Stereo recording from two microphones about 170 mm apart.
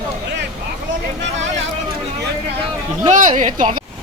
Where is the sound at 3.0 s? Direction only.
45° right (ahead or behind).